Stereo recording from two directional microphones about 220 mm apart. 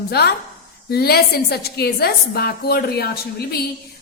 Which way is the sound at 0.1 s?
45° left (ahead or behind).